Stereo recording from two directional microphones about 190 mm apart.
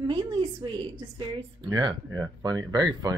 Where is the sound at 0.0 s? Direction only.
25° right (ahead or behind).